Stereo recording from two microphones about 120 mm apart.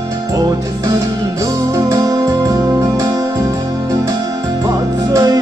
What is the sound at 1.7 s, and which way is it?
Music, 30° right (ahead or behind).